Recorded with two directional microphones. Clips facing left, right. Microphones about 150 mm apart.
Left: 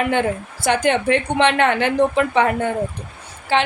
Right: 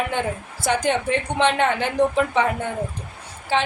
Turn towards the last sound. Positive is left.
turn(degrees=70)  # may be behind; listen again after turning